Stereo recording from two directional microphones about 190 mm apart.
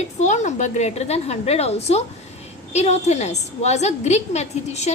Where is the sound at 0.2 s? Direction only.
40° left (ahead or behind).